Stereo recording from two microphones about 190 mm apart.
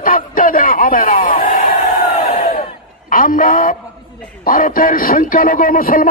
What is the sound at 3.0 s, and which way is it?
Speech, 45° left (ahead or behind).